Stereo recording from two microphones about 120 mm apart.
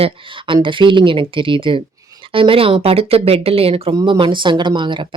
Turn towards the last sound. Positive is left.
turn(degrees=-40)  # may be behind; listen again after turning